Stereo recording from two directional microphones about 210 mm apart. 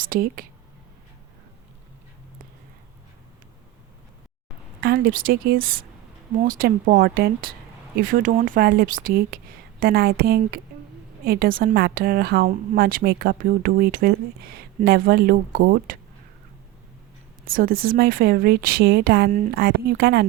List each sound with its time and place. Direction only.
0.0 s speech: 45° right (ahead or behind)
4.8 s speech: 50° right (ahead or behind)
17.4 s speech: 45° right (ahead or behind)